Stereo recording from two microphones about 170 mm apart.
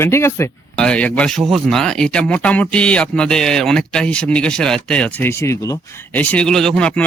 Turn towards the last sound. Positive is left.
turn(degrees=5)  # may be behind; listen again after turning